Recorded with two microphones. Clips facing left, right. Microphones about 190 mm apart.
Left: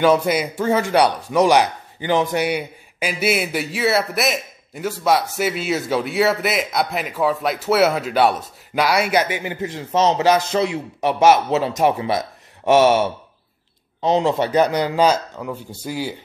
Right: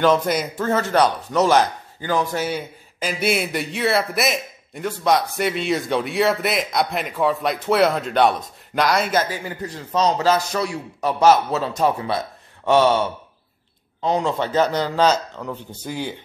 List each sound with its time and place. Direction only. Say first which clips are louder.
0.0 s a man's voice: left 2 dB; 10° left (ahead or behind)